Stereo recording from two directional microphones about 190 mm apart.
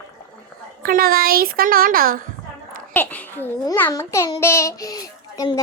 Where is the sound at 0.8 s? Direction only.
50° right (ahead or behind).